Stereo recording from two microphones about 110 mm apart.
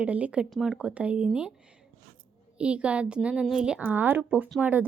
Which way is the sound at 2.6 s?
10° right (ahead or behind).